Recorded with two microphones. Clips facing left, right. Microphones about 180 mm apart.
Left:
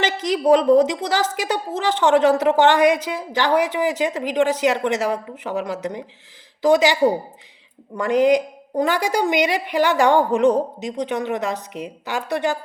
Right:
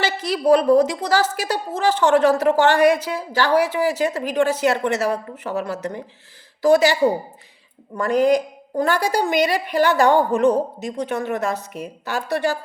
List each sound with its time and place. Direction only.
0.0 s a woman's voice: 20° left (ahead or behind)